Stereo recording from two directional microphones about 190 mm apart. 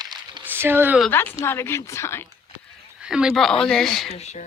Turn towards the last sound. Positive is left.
turn(degrees=35)  # may be behind; listen again after turning